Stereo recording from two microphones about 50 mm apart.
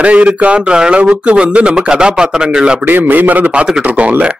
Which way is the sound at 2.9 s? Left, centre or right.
Right.